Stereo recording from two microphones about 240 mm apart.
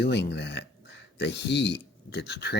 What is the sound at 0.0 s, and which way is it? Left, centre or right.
Speech, left.